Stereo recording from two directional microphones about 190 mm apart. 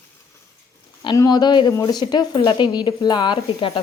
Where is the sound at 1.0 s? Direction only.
20° left (ahead or behind).